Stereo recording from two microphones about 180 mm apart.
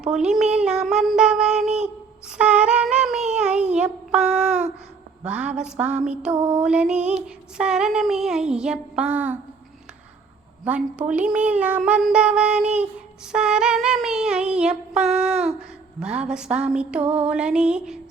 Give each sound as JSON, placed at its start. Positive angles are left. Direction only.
{"t": 0.0, "sound": "speech", "side_deg": -5}
{"t": 1.6, "sound": "a sound", "side_deg": -40}
{"t": 2.4, "sound": "humming", "side_deg": -5}
{"t": 3.3, "sound": "a sound", "side_deg": -5}
{"t": 3.8, "sound": "speech", "side_deg": -5}
{"t": 10.6, "sound": "speech", "side_deg": -5}